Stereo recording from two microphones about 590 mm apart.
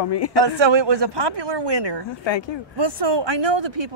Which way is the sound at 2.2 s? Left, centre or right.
Left.